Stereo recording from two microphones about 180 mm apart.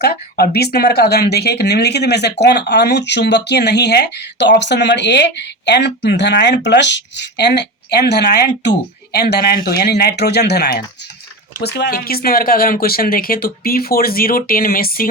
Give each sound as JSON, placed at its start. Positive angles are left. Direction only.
{"t": 0.0, "sound": "speech", "side_deg": 60}